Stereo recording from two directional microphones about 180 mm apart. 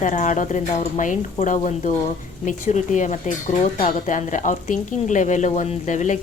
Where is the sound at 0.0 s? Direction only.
45° left (ahead or behind).